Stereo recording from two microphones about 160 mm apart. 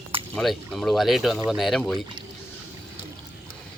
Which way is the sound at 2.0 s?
30° right (ahead or behind).